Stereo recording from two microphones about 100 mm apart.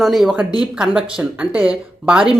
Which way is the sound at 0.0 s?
5° right (ahead or behind).